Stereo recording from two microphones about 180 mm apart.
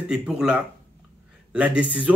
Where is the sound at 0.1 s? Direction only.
5° right (ahead or behind).